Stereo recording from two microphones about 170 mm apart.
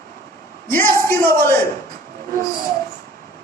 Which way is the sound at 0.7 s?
15° left (ahead or behind).